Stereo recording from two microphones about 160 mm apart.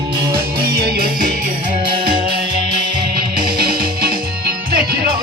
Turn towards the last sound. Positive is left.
turn(degrees=-70)  # may be behind; listen again after turning